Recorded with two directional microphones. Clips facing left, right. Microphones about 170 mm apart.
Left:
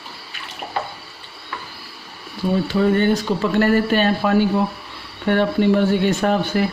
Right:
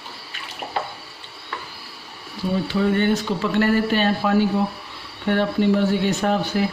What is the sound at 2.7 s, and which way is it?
Speech, 40° left (ahead or behind).